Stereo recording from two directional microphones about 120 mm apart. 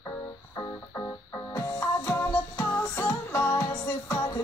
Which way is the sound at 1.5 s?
20° left (ahead or behind).